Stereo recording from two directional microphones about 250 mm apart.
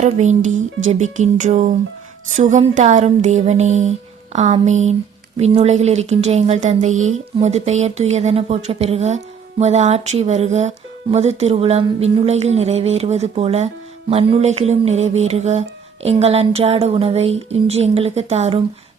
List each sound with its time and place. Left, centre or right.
0.0 s speech: right